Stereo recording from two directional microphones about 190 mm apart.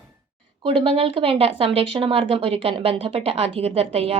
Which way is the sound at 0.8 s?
30° right (ahead or behind).